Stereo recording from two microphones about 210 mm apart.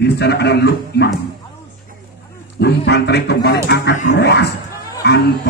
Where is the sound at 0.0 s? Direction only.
50° left (ahead or behind).